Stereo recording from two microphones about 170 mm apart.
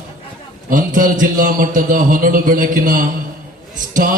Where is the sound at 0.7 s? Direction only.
50° right (ahead or behind).